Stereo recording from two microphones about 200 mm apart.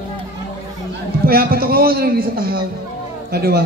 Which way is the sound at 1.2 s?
50° right (ahead or behind).